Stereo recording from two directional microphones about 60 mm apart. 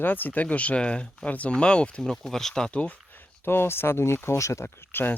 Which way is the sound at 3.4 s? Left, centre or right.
Left.